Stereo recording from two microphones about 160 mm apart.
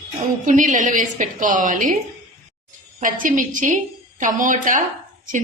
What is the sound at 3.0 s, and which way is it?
A woman's voice, 55° right (ahead or behind).